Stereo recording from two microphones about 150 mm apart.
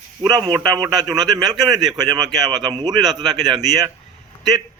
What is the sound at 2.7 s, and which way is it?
Speech, 35° right (ahead or behind).